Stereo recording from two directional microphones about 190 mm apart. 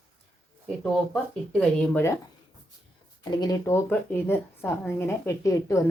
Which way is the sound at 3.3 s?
20° left (ahead or behind).